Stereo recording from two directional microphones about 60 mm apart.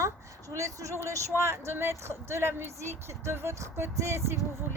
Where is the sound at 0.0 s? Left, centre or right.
Right.